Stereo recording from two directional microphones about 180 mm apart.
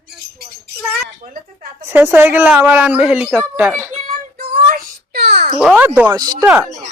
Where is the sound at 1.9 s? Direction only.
10° right (ahead or behind).